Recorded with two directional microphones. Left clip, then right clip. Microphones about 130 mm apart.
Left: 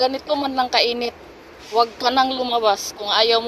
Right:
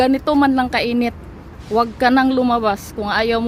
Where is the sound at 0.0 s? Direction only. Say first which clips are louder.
Right 5 dB; 70° right (ahead or behind).